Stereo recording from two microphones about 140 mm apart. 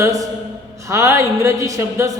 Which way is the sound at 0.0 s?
20° right (ahead or behind).